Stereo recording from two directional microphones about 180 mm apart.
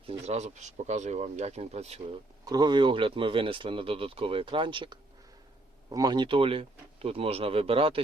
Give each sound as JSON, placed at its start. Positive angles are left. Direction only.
{"t": 0.0, "sound": "speech", "side_deg": -35}
{"t": 2.4, "sound": "speech", "side_deg": -20}